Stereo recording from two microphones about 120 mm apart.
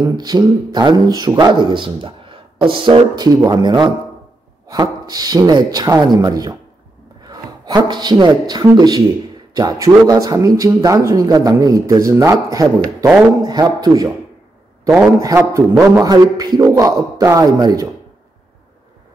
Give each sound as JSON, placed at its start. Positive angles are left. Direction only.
{"t": 0.2, "sound": "a man's voice", "side_deg": -35}
{"t": 15.1, "sound": "a man's voice", "side_deg": -25}